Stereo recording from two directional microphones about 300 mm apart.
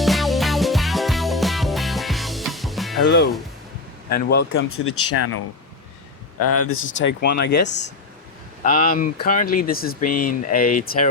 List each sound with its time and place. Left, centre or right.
0.0 s music: centre
4.1 s speech: left
6.4 s speech: left